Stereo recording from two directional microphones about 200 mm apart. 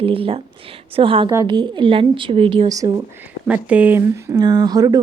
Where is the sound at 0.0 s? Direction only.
25° right (ahead or behind).